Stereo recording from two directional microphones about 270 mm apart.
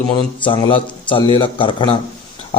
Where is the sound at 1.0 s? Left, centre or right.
Centre.